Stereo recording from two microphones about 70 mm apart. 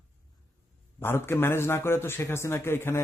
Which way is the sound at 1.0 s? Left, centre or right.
Left.